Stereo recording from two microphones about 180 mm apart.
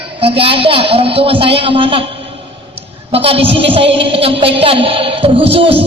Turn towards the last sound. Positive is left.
turn(degrees=-30)  # may be behind; listen again after turning